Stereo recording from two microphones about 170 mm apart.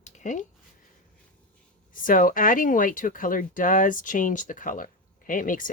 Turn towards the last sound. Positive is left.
turn(degrees=50)  # may be behind; listen again after turning